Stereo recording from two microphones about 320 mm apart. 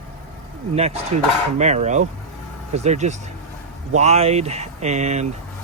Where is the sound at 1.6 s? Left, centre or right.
Right.